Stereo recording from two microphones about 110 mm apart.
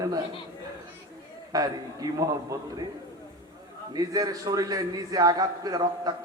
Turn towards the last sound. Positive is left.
turn(degrees=-40)  # may be behind; listen again after turning